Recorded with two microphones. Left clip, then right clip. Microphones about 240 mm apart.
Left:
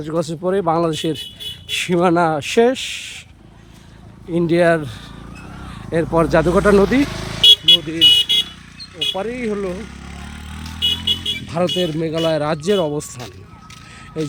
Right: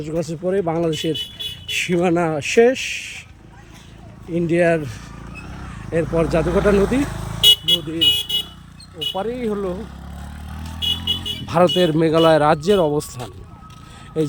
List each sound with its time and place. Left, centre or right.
0.0 s speech: centre
4.4 s speech: centre
7.0 s vehicle: right
9.1 s speech: centre
9.8 s vehicle: right; by 13.3 s centre